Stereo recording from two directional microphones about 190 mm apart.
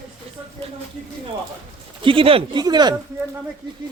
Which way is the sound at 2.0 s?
25° right (ahead or behind).